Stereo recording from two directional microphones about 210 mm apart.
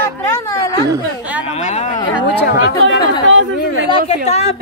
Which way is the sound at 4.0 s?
30° left (ahead or behind).